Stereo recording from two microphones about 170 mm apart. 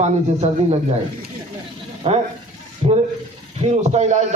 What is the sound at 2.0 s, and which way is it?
A man's voice, 35° right (ahead or behind).